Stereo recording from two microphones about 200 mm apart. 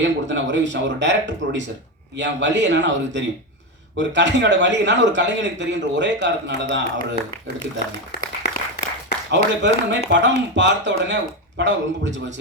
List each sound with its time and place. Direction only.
0.0 s a man's voice: 65° right (ahead or behind)
8.2 s applause: 55° left (ahead or behind)
9.3 s a man's voice: 65° right (ahead or behind)